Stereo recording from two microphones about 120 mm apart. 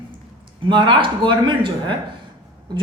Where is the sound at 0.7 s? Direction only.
40° right (ahead or behind).